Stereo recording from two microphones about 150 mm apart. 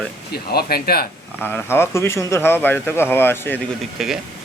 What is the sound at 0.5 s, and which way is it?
Speech, 90° left.